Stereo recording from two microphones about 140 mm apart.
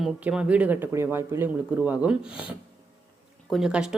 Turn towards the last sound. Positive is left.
turn(degrees=-5)  # may be behind; listen again after turning